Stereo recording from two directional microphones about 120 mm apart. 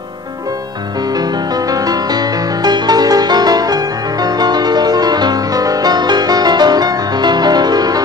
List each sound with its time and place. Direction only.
1.1 s music: 30° right (ahead or behind)